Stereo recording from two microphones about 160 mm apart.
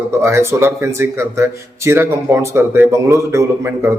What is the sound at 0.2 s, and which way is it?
A man's voice, 15° right (ahead or behind).